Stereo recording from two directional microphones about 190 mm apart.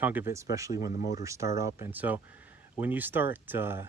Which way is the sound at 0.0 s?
10° right (ahead or behind).